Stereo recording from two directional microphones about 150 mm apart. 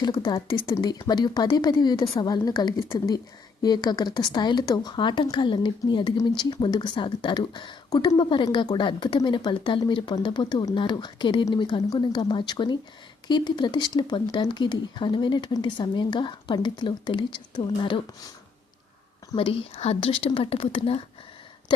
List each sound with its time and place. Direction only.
0.0 s speech: 30° left (ahead or behind)
19.4 s speech: 40° left (ahead or behind)